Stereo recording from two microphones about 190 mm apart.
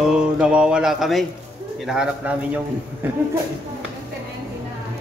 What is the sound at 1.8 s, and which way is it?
Speech, 5° right (ahead or behind).